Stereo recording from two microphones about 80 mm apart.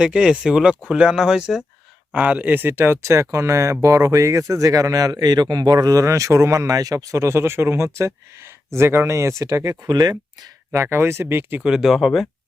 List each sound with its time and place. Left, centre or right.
0.0 s speech: centre; by 10.5 s right
10.7 s speech: right
11.6 s speech: centre